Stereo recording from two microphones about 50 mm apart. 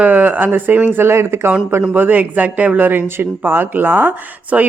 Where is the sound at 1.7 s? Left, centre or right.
Right.